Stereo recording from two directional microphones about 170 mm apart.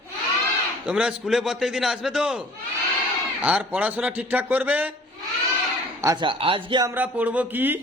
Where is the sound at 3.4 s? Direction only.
10° right (ahead or behind).